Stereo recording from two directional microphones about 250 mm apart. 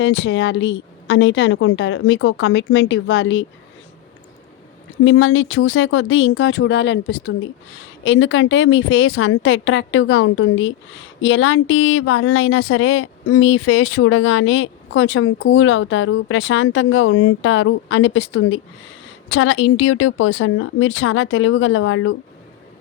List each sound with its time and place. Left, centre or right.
0.0 s speech: left
5.0 s speech: left